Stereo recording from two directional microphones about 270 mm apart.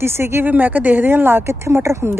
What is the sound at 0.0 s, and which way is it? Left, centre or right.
A woman's voice, centre.